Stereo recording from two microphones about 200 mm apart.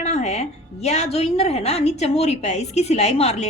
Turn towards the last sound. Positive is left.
turn(degrees=30)  # may be behind; listen again after turning